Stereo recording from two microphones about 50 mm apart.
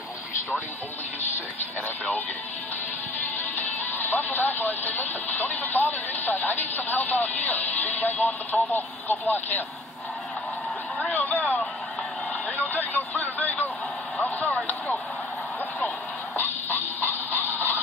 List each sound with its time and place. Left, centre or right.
3.5 s speech: left
11.1 s speech: left
14.2 s vehicle: left
16.4 s music: left